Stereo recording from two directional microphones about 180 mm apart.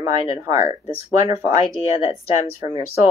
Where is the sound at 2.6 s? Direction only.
20° right (ahead or behind).